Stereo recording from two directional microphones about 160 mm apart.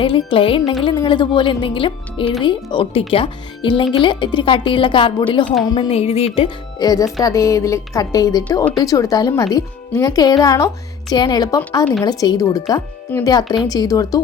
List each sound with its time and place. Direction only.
0.0 s a woman's voice: 35° left (ahead or behind)
5.9 s speech: 40° left (ahead or behind); by 14.2 s 20° left (ahead or behind)